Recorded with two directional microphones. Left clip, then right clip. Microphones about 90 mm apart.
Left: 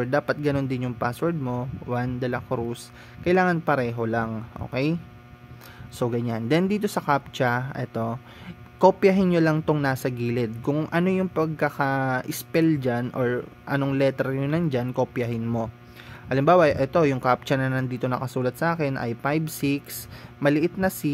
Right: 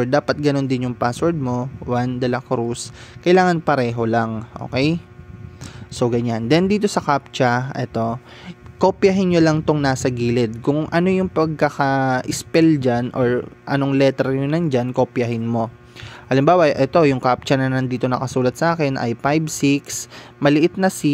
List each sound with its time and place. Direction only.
0.0 s speech: 50° right (ahead or behind)